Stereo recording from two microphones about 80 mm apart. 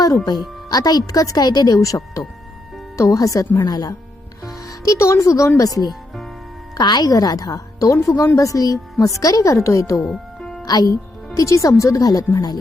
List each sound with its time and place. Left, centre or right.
0.7 s speech: left
3.0 s speech: left
4.4 s speech: left
6.7 s speech: left
10.0 s music: centre
10.7 s speech: left
11.3 s speech: left